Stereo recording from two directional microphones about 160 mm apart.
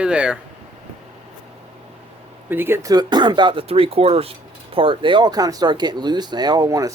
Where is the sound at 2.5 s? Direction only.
15° right (ahead or behind).